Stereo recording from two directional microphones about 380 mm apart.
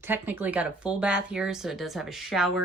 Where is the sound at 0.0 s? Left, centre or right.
Centre.